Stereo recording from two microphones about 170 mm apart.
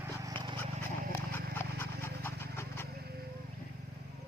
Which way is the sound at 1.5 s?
15° left (ahead or behind).